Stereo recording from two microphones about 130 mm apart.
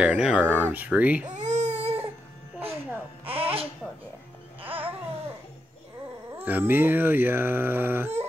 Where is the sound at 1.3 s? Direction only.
65° right (ahead or behind).